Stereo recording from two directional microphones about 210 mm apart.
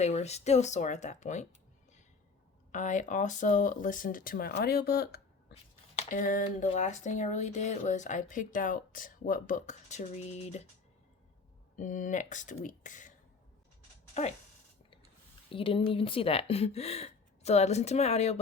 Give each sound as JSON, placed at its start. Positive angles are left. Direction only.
{"t": 0.0, "sound": "speech", "side_deg": 30}
{"t": 2.7, "sound": "speech", "side_deg": 35}
{"t": 6.0, "sound": "speech", "side_deg": 40}
{"t": 11.8, "sound": "speech", "side_deg": 35}
{"t": 15.5, "sound": "speech", "side_deg": 25}